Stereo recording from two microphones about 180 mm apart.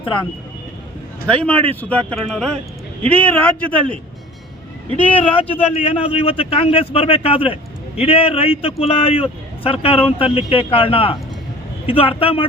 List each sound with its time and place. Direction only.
1.3 s speech: 10° left (ahead or behind)
5.3 s a man's voice: 30° left (ahead or behind)